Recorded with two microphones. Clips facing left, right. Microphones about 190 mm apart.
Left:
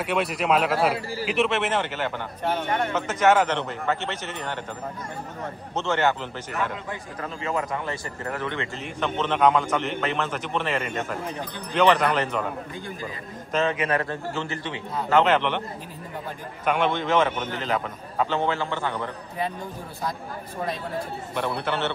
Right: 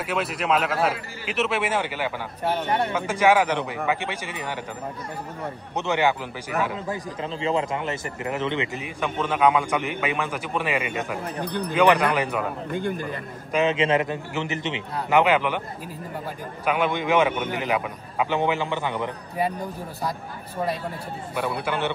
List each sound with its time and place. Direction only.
0.0 s a man's voice: centre (ahead or behind)
5.8 s speech: 15° right (ahead or behind)
7.2 s speech: 25° right (ahead or behind)
12.7 s a man's voice: 60° right (ahead or behind)
13.5 s speech: 15° right (ahead or behind)
16.6 s speech: 10° right (ahead or behind)
21.4 s speech: 10° right (ahead or behind)